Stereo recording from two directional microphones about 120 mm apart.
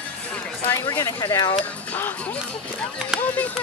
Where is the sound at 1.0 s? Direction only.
25° left (ahead or behind).